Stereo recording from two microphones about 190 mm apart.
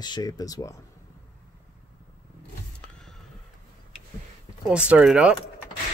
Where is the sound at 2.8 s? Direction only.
5° left (ahead or behind).